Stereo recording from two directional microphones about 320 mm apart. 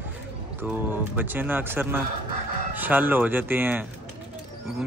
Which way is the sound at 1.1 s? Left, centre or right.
Centre.